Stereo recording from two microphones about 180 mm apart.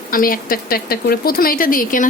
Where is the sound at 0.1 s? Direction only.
50° left (ahead or behind).